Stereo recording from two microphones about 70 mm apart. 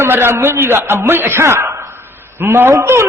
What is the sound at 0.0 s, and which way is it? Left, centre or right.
A man's voice, right.